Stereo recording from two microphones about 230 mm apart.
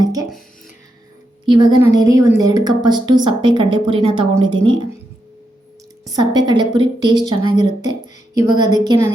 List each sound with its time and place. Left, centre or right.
0.0 s a woman's voice: centre
1.5 s a woman's voice: centre
6.1 s a woman's voice: centre